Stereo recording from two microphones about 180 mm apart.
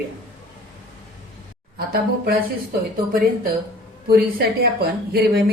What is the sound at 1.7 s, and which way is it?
Speech, 55° right (ahead or behind).